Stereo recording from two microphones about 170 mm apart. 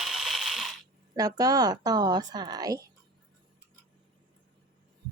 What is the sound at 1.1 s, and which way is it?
A woman's voice, 20° right (ahead or behind).